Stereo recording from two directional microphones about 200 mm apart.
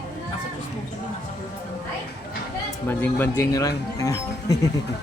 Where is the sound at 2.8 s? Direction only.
10° left (ahead or behind).